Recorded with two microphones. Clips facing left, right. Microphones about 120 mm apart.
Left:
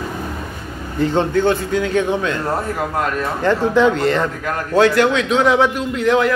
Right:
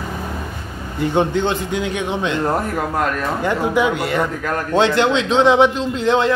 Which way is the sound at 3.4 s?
10° right (ahead or behind).